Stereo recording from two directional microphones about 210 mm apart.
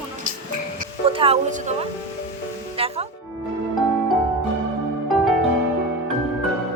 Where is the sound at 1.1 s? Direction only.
25° right (ahead or behind).